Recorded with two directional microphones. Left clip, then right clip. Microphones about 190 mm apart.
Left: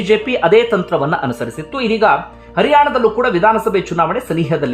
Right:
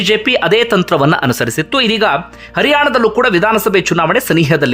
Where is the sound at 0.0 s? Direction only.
15° right (ahead or behind).